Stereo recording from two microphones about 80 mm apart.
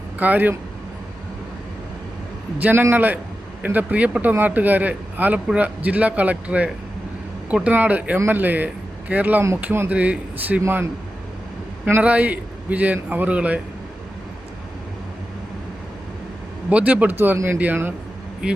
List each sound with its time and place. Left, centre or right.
0.2 s speech: right
2.6 s a man's voice: right
12.0 s a man's voice: centre
16.6 s speech: centre
17.3 s a man's voice: right
17.6 s speech: right
18.4 s speech: centre